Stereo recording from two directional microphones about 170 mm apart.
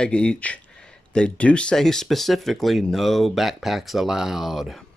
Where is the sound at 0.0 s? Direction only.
5° left (ahead or behind).